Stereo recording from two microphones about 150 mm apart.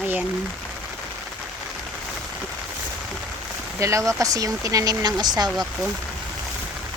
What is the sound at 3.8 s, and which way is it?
Speech, 20° right (ahead or behind).